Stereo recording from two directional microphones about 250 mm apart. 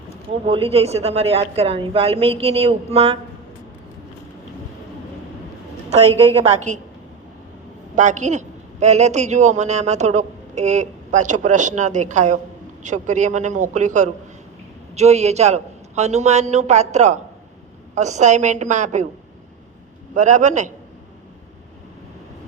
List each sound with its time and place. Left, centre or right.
0.4 s a man's voice: right
6.1 s a man's voice: right
7.9 s a man's voice: right
20.1 s a man's voice: right